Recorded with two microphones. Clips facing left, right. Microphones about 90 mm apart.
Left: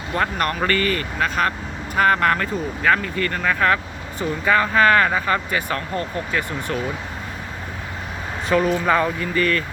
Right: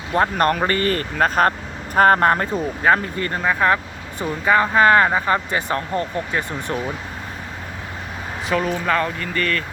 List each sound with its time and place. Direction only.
0.1 s speech: 35° right (ahead or behind)
0.9 s speech: 40° right (ahead or behind)
8.4 s speech: centre (ahead or behind)